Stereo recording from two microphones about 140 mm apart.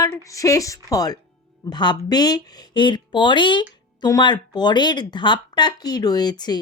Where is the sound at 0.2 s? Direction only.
25° left (ahead or behind).